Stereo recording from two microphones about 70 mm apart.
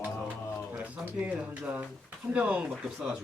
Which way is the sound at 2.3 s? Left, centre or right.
Centre.